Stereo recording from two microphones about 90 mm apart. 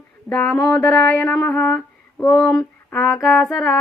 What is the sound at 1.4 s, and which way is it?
Female singing, 20° left (ahead or behind).